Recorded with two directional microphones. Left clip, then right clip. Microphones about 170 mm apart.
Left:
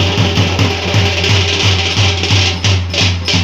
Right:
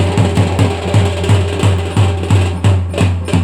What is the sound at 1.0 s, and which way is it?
Music, 25° right (ahead or behind).